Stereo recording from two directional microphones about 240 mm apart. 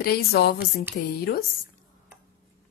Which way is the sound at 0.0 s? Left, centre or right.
Left.